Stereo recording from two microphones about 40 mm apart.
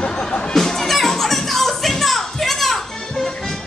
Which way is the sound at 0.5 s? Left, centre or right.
Centre.